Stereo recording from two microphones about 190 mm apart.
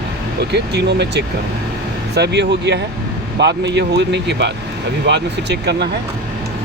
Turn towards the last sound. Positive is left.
turn(degrees=-65)  # may be behind; listen again after turning